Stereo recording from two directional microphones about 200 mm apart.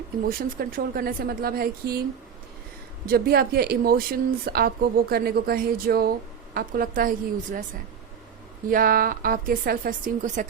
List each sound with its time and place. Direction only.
0.3 s speech: 45° right (ahead or behind)
3.1 s speech: 50° right (ahead or behind)
8.7 s speech: 45° right (ahead or behind)